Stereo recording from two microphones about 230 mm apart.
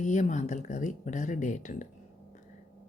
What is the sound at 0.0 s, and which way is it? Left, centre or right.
Speech, left.